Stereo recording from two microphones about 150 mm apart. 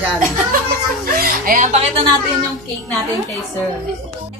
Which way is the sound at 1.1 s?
70° right (ahead or behind).